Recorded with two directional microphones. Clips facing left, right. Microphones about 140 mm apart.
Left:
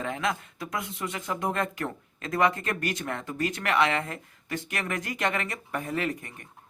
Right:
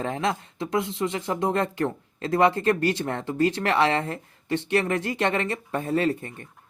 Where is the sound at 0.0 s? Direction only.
30° right (ahead or behind).